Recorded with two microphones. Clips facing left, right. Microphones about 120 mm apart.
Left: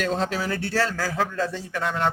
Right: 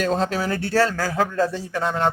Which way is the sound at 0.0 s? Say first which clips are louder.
Right 3 dB; 40° right (ahead or behind).